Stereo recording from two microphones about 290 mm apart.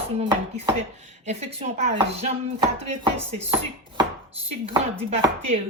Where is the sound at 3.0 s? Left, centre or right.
Right.